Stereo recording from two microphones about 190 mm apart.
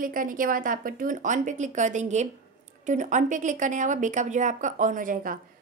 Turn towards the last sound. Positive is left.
turn(degrees=-45)  # may be behind; listen again after turning